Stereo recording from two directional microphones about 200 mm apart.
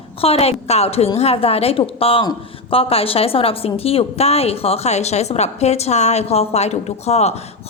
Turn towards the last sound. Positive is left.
turn(degrees=30)  # may be behind; listen again after turning